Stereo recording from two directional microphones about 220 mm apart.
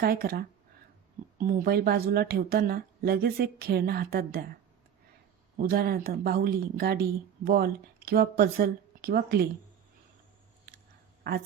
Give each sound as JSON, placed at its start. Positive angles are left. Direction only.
{"t": 0.0, "sound": "speech", "side_deg": -45}
{"t": 5.5, "sound": "speech", "side_deg": -45}
{"t": 11.2, "sound": "speech", "side_deg": -45}